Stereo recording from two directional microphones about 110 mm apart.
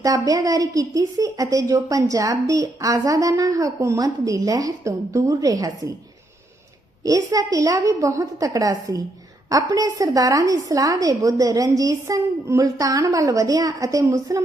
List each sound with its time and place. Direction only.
0.0 s a woman's voice: 35° right (ahead or behind)
7.0 s a woman's voice: 30° right (ahead or behind)